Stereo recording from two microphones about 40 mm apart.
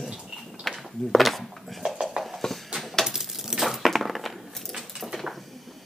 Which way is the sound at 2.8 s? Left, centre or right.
Centre.